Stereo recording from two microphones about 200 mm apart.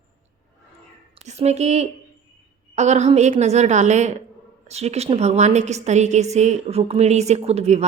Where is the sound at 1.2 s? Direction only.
30° right (ahead or behind).